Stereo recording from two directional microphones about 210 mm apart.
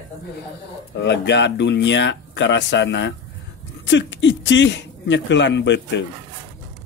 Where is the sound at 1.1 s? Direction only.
55° left (ahead or behind).